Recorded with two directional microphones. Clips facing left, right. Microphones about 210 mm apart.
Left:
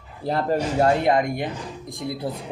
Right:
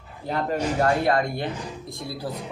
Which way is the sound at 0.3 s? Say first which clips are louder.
Left 2 dB; 35° left (ahead or behind).